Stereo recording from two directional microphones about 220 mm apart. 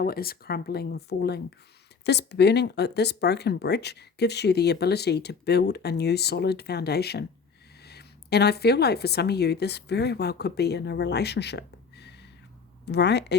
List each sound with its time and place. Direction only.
0.0 s a woman's voice: 45° left (ahead or behind)